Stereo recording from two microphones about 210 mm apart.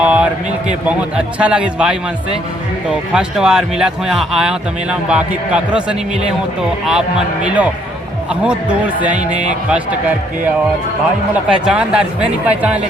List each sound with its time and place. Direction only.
0.0 s a sound: 5° right (ahead or behind)
0.9 s speech: 5° right (ahead or behind)
3.1 s a man's voice: 5° right (ahead or behind)
9.1 s music: 35° right (ahead or behind)
11.4 s speech: 5° right (ahead or behind)